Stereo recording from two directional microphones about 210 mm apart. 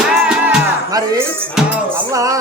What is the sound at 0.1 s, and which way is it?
Music, 5° right (ahead or behind).